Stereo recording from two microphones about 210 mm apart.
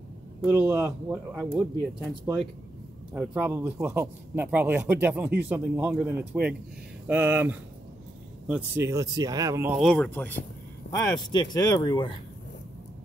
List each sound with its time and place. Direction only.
0.4 s a man's voice: 5° right (ahead or behind)
3.1 s a man's voice: 5° right (ahead or behind)
9.8 s speech: 5° left (ahead or behind); by 12.1 s 20° left (ahead or behind)